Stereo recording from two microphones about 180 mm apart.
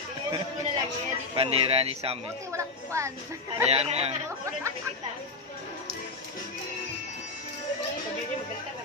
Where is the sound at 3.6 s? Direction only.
35° right (ahead or behind).